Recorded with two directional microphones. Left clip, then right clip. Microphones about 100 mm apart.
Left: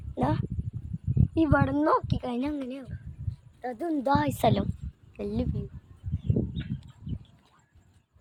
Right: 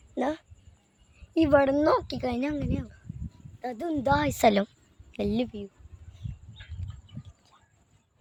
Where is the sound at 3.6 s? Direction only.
5° right (ahead or behind).